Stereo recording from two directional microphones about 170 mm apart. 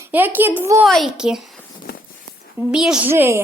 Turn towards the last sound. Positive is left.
turn(degrees=-15)  # may be behind; listen again after turning